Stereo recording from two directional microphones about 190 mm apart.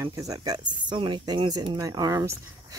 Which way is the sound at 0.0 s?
20° right (ahead or behind).